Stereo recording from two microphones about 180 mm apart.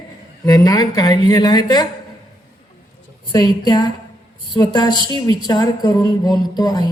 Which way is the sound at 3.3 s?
20° left (ahead or behind).